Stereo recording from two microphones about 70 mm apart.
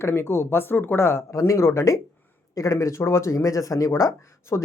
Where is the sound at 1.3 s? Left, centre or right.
Left.